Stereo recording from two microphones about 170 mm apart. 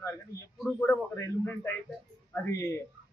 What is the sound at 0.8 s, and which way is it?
Speech, 10° left (ahead or behind).